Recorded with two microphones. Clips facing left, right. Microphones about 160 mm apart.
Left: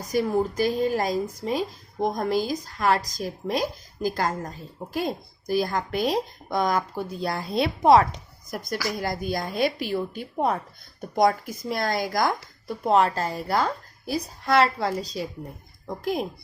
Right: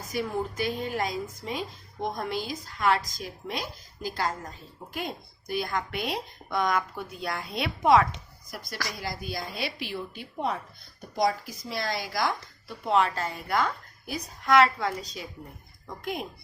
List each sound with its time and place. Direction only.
0.1 s a woman's voice: 40° left (ahead or behind)